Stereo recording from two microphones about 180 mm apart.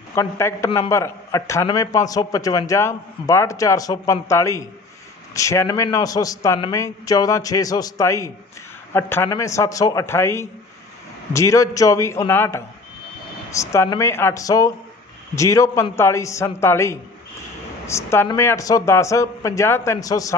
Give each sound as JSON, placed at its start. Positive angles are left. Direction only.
{"t": 0.1, "sound": "a man's voice", "side_deg": 15}